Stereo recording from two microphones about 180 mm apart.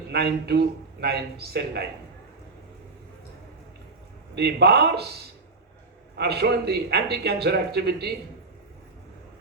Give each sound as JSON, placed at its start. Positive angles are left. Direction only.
{"t": 0.1, "sound": "a man's voice", "side_deg": -65}
{"t": 4.4, "sound": "a man's voice", "side_deg": -65}